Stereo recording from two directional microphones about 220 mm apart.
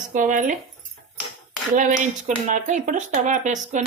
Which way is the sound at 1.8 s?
35° right (ahead or behind).